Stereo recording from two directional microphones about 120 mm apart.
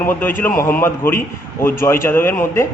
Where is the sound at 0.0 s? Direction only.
15° left (ahead or behind).